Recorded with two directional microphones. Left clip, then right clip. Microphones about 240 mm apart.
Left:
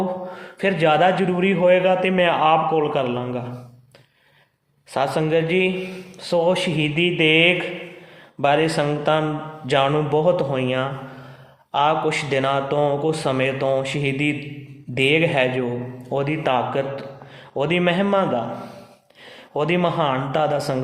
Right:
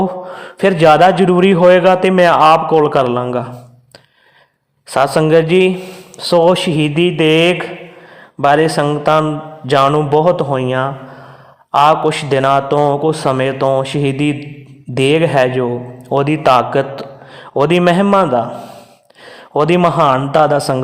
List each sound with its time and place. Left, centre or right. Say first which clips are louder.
0.3 s a man's voice: right 8 dB; right
4.9 s a man's voice: right 9 dB; right
19.5 s a man's voice: right 9 dB; right